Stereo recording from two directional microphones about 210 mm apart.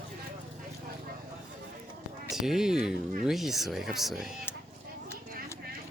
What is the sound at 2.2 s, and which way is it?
Speech, centre (ahead or behind).